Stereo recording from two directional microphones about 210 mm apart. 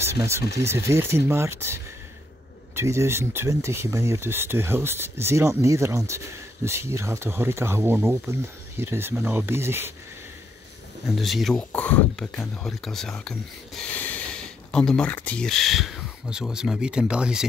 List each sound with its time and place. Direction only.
0.0 s speech: 10° right (ahead or behind)
11.1 s speech: centre (ahead or behind)